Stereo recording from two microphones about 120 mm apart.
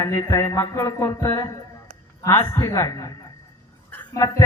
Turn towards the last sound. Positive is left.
turn(degrees=25)  # may be behind; listen again after turning